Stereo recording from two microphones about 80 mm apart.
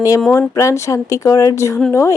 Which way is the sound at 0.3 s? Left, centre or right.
Left.